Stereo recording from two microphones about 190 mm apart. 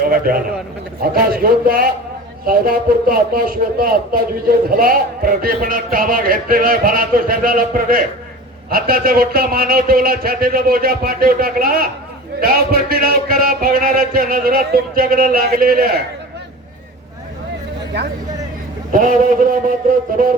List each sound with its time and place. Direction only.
0.0 s a man's voice: 50° right (ahead or behind)
18.9 s a man's voice: 45° right (ahead or behind)